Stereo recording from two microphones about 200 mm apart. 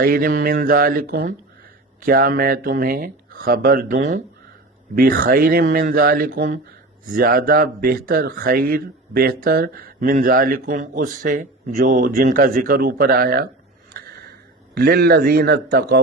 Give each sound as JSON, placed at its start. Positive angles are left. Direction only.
{"t": 0.0, "sound": "speech", "side_deg": -45}
{"t": 13.9, "sound": "a sound", "side_deg": -50}
{"t": 14.8, "sound": "speech", "side_deg": -50}